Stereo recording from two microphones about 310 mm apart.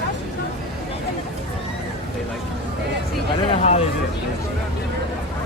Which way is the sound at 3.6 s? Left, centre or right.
Left.